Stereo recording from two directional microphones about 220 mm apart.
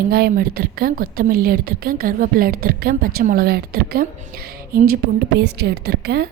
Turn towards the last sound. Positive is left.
turn(degrees=-45)  # may be behind; listen again after turning